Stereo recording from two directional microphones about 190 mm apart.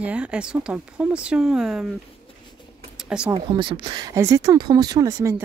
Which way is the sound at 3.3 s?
25° right (ahead or behind).